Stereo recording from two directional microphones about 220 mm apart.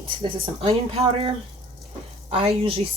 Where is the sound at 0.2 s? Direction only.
25° right (ahead or behind).